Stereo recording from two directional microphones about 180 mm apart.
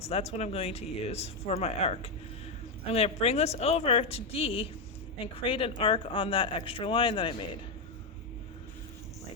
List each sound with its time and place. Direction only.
0.0 s a woman's voice: 35° left (ahead or behind)